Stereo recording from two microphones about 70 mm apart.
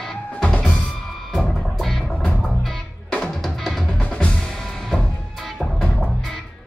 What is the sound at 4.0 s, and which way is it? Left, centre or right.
Percussion, centre.